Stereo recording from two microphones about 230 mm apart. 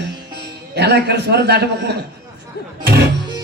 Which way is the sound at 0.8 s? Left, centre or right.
Right.